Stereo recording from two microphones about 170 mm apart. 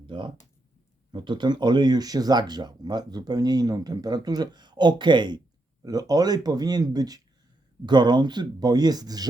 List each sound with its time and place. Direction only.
0.1 s speech: 25° right (ahead or behind)